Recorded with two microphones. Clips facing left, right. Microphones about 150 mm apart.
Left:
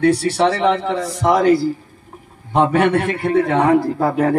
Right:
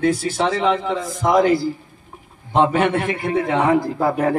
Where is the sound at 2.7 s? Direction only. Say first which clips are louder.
Left 3 dB; 65° left (ahead or behind).